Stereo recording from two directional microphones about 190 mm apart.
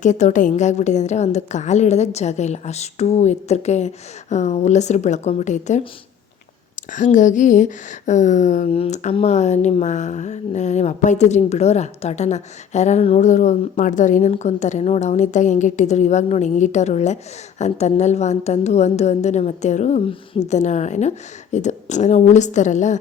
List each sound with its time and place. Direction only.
0.0 s speech: 40° left (ahead or behind)
6.9 s speech: 40° left (ahead or behind)